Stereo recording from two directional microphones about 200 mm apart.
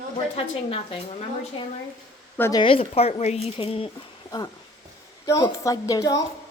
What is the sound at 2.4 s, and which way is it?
A woman's voice, 20° left (ahead or behind).